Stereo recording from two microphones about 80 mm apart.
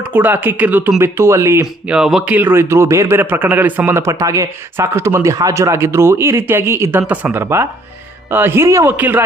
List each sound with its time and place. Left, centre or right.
0.0 s speech: right
1.0 s speech: right
1.6 s speech: centre
2.2 s speech: right
4.1 s speech: right
7.1 s speech: centre
7.3 s speech: right
9.0 s speech: right